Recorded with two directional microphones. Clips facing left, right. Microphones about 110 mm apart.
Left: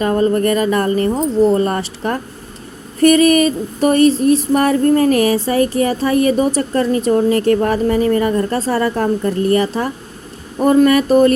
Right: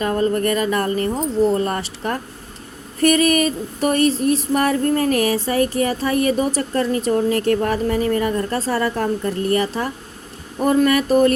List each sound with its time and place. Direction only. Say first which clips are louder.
0.0 s speech: left 4 dB; 30° left (ahead or behind)
3.0 s a sound: left 5 dB; 30° left (ahead or behind)
7.3 s speech: left 4 dB; 30° left (ahead or behind)